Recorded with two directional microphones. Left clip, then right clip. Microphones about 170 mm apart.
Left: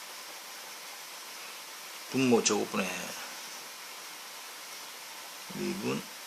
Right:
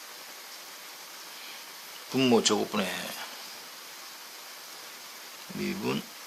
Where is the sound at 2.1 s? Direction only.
35° right (ahead or behind).